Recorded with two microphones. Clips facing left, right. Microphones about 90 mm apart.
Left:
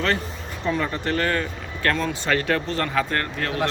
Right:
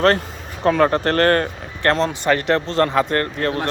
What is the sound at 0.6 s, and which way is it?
Speech, 70° right (ahead or behind).